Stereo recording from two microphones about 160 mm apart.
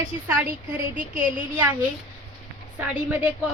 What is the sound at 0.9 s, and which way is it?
Speech, 55° right (ahead or behind).